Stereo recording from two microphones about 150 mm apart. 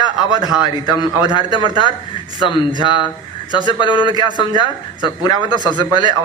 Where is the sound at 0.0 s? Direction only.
30° left (ahead or behind).